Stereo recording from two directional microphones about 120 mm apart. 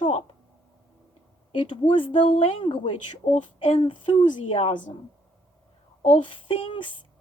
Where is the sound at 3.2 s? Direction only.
90° left.